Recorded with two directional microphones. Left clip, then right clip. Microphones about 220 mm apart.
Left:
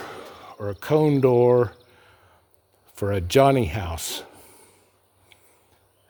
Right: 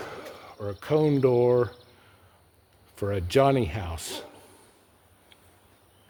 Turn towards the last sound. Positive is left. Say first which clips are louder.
# left 4 dB
turn(degrees=35)  # may be behind; listen again after turning